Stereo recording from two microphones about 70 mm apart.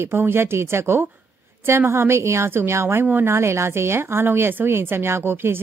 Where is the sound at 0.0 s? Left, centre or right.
Right.